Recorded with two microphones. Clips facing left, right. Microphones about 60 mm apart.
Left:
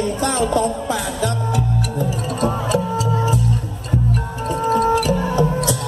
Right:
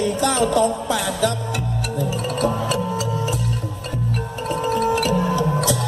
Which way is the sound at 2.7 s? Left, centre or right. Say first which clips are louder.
Left 3 dB; left.